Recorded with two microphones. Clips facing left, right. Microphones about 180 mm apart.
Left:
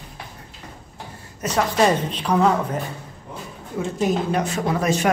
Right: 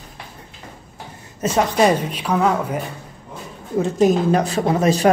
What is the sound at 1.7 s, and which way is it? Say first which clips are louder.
A woman's voice: right 2 dB; 10° right (ahead or behind).